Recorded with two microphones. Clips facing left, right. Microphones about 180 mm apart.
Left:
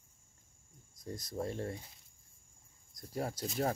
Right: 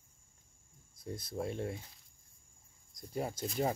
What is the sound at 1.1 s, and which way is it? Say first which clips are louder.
Speech: even; 5° right (ahead or behind).